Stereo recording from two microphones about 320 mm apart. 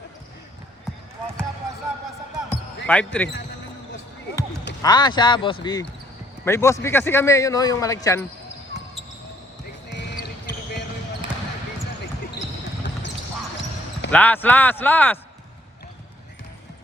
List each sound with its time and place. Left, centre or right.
2.8 s speech: centre
4.8 s a man's voice: centre
9.9 s basketball bounce: left
14.1 s speech: centre